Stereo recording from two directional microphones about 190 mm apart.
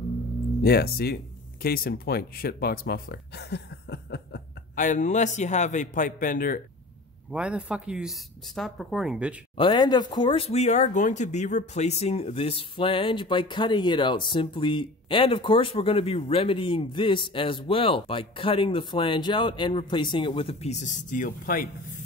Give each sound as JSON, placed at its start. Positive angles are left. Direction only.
{"t": 0.6, "sound": "speech", "side_deg": 55}
{"t": 4.8, "sound": "a man's voice", "side_deg": 40}
{"t": 7.2, "sound": "speech", "side_deg": -5}
{"t": 9.6, "sound": "speech", "side_deg": 25}